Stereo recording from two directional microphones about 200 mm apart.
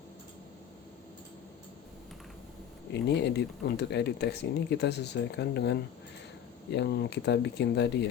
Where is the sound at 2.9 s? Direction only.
55° left (ahead or behind).